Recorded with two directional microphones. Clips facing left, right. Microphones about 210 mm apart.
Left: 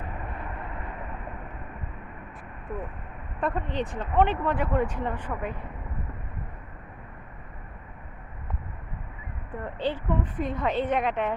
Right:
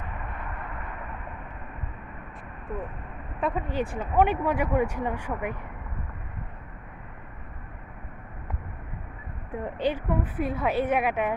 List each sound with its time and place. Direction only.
3.4 s speech: 5° right (ahead or behind)
9.5 s speech: 15° right (ahead or behind)